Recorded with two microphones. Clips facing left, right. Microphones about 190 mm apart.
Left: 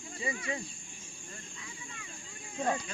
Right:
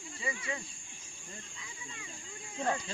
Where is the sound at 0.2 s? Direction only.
30° left (ahead or behind).